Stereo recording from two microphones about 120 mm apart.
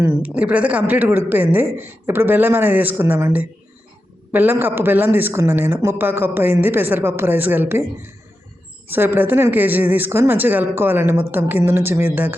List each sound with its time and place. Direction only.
0.2 s speech: 10° right (ahead or behind)